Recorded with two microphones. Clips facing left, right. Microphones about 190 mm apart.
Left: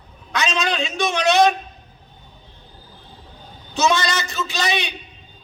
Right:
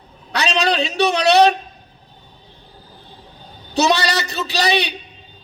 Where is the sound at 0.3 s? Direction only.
35° right (ahead or behind).